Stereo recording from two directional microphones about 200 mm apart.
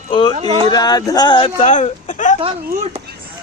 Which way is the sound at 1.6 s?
35° left (ahead or behind).